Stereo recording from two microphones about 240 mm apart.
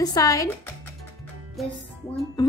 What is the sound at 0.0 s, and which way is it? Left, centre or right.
Speech, centre.